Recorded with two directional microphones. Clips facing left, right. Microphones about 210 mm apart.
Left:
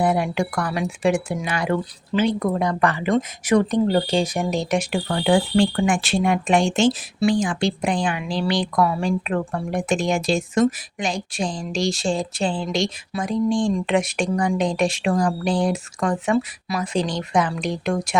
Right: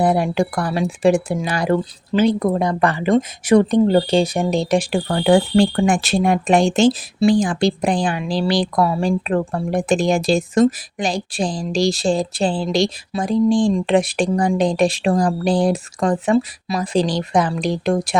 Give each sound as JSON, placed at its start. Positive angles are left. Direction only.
{"t": 0.0, "sound": "speech", "side_deg": -35}